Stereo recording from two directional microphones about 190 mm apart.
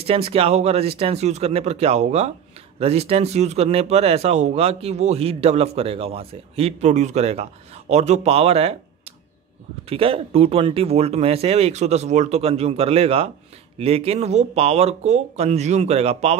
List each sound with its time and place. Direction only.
0.0 s speech: 30° right (ahead or behind)